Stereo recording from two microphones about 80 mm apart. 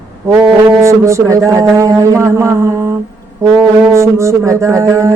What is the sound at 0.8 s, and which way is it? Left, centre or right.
Speech, right.